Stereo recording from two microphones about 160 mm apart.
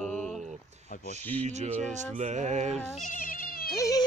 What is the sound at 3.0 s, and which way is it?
Cat, 55° left (ahead or behind).